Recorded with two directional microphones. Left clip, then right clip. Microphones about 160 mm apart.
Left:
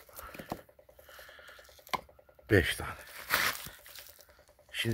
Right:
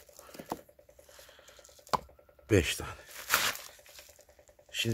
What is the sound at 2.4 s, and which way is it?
Speech, 15° right (ahead or behind).